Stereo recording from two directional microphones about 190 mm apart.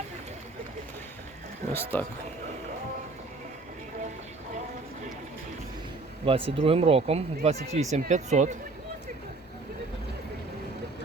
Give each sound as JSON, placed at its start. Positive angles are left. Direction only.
{"t": 1.7, "sound": "speech", "side_deg": 10}
{"t": 6.2, "sound": "speech", "side_deg": -30}